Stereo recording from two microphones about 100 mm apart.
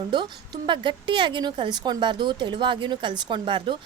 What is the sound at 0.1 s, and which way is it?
A woman's voice, 45° right (ahead or behind).